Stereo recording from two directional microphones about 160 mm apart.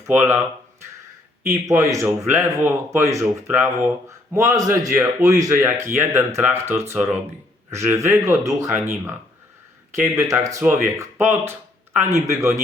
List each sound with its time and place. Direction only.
0.0 s speech: 15° right (ahead or behind)
1.5 s a man's voice: 20° right (ahead or behind)
10.2 s a man's voice: 20° right (ahead or behind)